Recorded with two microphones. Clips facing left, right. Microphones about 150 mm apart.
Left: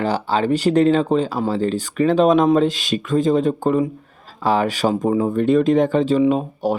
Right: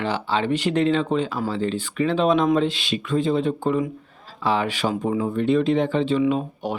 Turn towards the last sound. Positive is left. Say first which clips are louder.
# left 5 dB
turn(degrees=40)  # may be behind; listen again after turning